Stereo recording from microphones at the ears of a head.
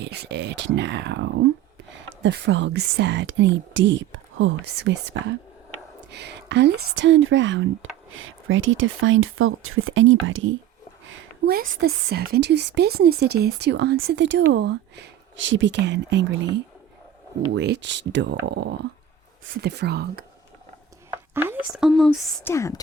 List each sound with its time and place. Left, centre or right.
0.0 s a woman's voice: right